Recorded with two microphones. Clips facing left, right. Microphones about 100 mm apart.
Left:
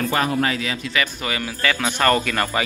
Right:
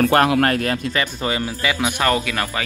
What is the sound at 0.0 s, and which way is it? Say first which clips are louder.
Speech: right 5 dB; 60° right (ahead or behind).